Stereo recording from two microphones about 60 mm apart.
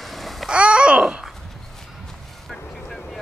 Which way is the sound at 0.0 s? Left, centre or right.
Centre.